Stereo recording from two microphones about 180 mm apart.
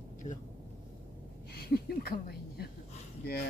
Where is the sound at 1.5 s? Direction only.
60° left (ahead or behind).